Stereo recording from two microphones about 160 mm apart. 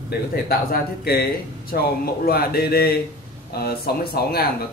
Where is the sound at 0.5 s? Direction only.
70° left (ahead or behind).